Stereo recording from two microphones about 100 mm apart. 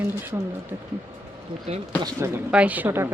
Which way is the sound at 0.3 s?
35° right (ahead or behind).